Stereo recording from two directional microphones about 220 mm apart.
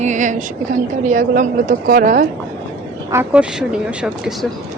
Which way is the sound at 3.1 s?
5° right (ahead or behind).